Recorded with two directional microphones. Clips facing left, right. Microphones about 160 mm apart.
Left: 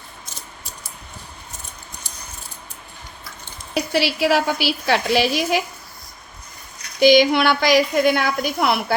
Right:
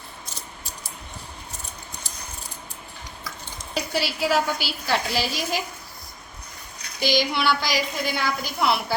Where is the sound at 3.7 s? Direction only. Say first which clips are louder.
Left 6 dB; 80° left.